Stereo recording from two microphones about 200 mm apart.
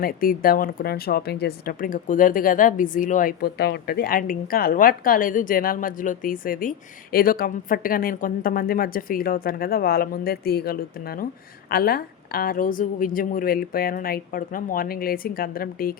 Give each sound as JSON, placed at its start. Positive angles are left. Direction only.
{"t": 0.0, "sound": "speech", "side_deg": 45}